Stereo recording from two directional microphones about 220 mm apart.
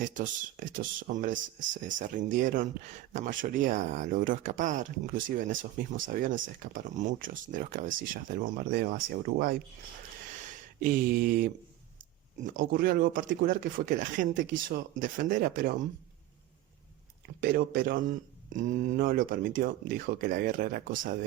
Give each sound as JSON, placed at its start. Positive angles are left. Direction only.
{"t": 0.0, "sound": "speech", "side_deg": -35}
{"t": 10.8, "sound": "speech", "side_deg": -40}
{"t": 12.7, "sound": "speech", "side_deg": -40}
{"t": 17.4, "sound": "speech", "side_deg": -40}